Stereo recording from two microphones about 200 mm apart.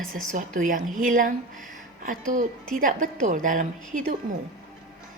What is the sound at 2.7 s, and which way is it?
A woman's voice, 40° right (ahead or behind).